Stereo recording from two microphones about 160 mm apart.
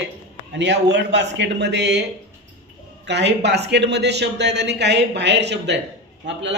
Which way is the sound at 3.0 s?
90° right.